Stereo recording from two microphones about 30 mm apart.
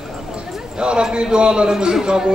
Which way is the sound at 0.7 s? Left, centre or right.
Right.